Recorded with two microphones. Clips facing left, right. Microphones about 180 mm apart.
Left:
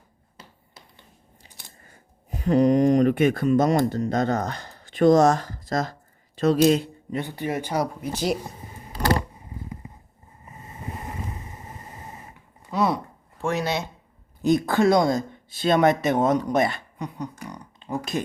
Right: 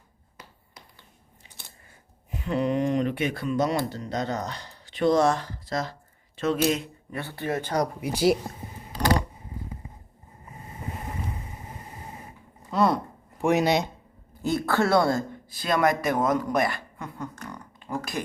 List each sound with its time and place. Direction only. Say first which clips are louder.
2.3 s speech: left 7 dB; 40° left (ahead or behind)
7.1 s speech: left 2 dB; 15° left (ahead or behind)
8.0 s speech: right 3 dB; 10° right (ahead or behind)
12.7 s a sound: right 1 dB; centre (ahead or behind)
13.4 s speech: right 4 dB; 15° right (ahead or behind)
14.4 s speech: left 5 dB; 15° left (ahead or behind)